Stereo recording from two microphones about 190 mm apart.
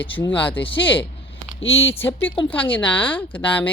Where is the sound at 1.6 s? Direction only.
90° left.